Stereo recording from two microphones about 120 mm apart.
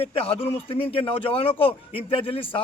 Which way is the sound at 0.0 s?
55° left (ahead or behind).